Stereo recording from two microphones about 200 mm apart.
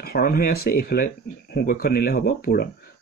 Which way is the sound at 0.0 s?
50° left (ahead or behind).